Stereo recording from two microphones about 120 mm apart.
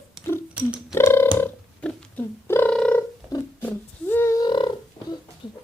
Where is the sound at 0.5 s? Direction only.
10° right (ahead or behind).